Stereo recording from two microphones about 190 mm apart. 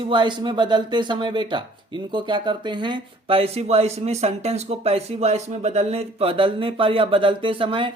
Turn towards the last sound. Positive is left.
turn(degrees=-25)  # may be behind; listen again after turning